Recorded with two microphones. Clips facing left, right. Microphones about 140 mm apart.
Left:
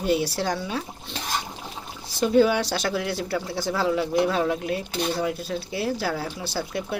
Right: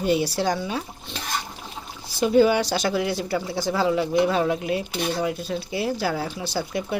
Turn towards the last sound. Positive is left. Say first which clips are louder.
# right 2 dB
turn(degrees=0)  # may be behind; listen again after turning